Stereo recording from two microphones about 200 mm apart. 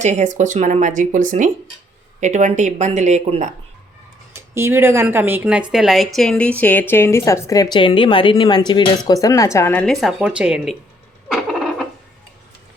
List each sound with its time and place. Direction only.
0.0 s speech: 35° right (ahead or behind)
4.5 s a woman's voice: 15° right (ahead or behind)